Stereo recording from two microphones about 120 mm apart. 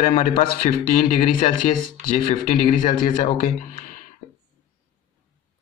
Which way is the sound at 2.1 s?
75° left (ahead or behind).